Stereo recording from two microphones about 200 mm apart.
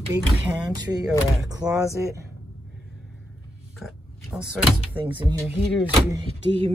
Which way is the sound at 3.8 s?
Centre (ahead or behind).